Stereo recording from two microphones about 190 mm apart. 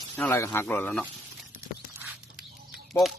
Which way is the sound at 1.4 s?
10° right (ahead or behind).